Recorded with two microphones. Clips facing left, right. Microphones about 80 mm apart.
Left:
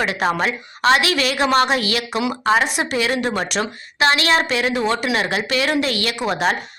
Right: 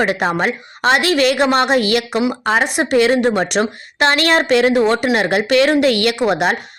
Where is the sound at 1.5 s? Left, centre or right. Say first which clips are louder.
Right 2 dB; right.